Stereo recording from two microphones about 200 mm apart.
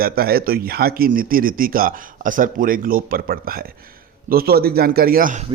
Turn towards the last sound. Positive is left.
turn(degrees=-40)  # may be behind; listen again after turning